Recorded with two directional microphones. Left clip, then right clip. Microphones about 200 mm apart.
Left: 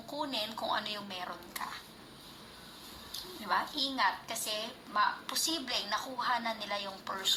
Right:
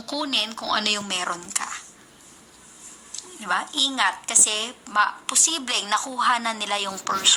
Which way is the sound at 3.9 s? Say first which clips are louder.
Right 10 dB; 55° right (ahead or behind).